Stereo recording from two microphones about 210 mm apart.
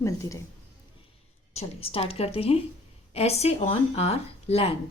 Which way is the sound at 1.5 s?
30° left (ahead or behind).